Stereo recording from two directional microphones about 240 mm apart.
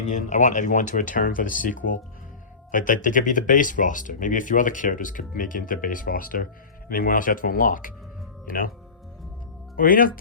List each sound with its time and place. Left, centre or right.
0.0 s speech: left
9.7 s speech: left